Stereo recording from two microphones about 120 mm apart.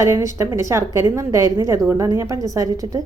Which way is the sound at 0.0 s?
25° right (ahead or behind).